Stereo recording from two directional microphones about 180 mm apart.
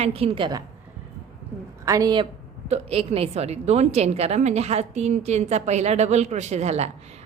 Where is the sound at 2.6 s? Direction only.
35° right (ahead or behind).